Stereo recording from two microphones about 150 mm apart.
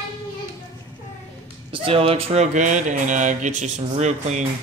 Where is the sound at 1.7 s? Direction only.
35° right (ahead or behind).